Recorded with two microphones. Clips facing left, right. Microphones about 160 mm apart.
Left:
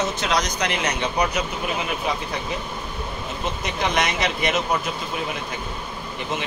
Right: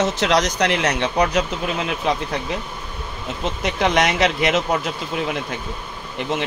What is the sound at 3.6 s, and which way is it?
Speech, 90° right.